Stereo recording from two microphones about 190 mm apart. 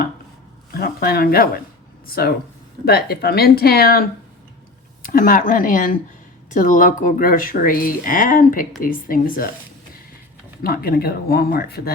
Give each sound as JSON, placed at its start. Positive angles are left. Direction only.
{"t": 0.7, "sound": "speech", "side_deg": 55}
{"t": 5.0, "sound": "speech", "side_deg": 45}
{"t": 10.6, "sound": "speech", "side_deg": 50}